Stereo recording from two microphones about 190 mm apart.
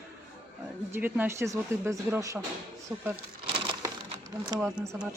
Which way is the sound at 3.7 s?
20° right (ahead or behind).